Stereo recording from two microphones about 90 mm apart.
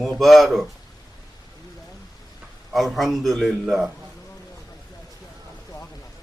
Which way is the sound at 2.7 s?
Centre (ahead or behind).